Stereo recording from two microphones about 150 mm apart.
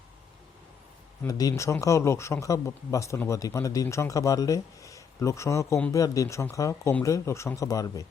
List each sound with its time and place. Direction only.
1.3 s speech: 25° left (ahead or behind)